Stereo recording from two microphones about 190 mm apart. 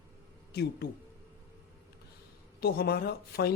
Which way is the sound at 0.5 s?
60° left (ahead or behind).